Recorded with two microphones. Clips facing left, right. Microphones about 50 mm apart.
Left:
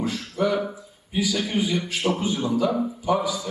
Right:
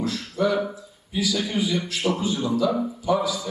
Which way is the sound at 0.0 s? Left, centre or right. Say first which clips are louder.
Even; left.